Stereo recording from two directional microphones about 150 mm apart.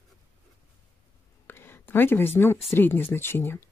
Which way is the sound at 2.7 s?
15° left (ahead or behind).